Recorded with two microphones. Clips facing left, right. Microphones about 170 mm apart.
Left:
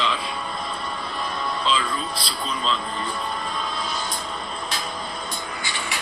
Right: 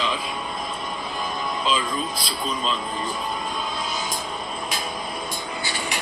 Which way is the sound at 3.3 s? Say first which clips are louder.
Even; 10° right (ahead or behind).